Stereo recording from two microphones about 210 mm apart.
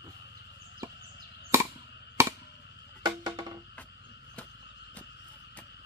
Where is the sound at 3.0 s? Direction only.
15° right (ahead or behind).